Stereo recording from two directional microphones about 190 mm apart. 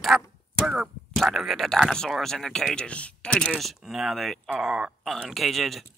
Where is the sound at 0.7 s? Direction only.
Centre (ahead or behind).